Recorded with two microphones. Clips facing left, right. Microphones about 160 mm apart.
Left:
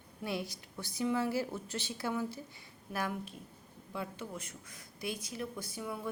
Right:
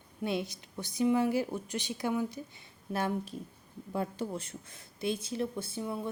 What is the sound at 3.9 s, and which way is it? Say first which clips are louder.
Speech: right 7 dB; 45° right (ahead or behind).